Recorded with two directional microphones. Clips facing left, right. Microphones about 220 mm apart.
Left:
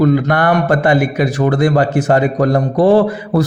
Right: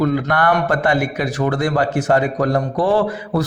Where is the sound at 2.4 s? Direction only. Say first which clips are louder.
Left 5 dB; 45° left (ahead or behind).